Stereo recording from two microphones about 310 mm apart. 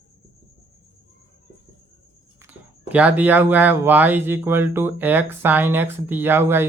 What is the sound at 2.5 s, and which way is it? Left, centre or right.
Speech, centre.